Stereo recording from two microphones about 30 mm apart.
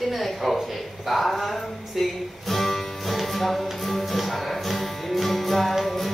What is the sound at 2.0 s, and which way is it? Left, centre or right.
Music, centre.